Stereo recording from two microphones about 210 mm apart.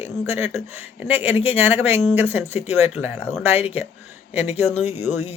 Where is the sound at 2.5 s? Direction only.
30° left (ahead or behind).